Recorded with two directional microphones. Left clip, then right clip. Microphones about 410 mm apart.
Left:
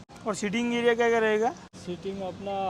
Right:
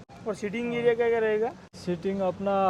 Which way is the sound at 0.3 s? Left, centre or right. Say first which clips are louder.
Left 2 dB; left.